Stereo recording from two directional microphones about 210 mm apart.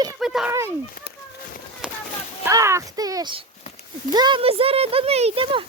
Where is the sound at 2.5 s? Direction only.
15° right (ahead or behind).